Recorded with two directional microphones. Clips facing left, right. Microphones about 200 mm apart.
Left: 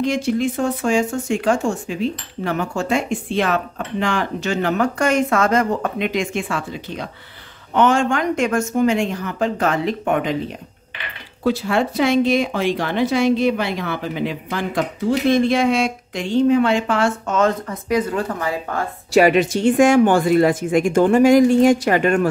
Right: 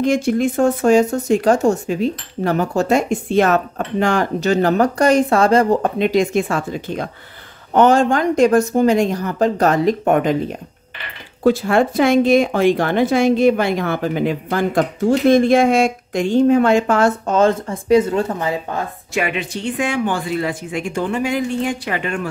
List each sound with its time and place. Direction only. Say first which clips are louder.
0.0 s speech: right 3 dB; 50° right (ahead or behind)
11.4 s speech: right 4 dB; 50° right (ahead or behind); by 18.9 s 20° right (ahead or behind)
19.1 s a woman's voice: left 8 dB; 40° left (ahead or behind)